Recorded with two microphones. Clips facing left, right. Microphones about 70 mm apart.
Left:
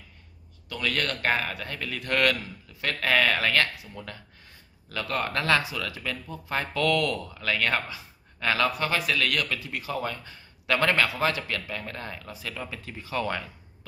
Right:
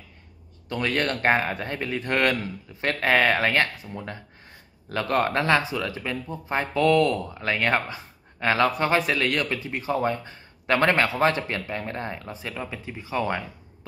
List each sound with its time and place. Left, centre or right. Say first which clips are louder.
0.7 s a man's voice: right 4 dB; right
5.3 s a man's voice: right 3 dB; right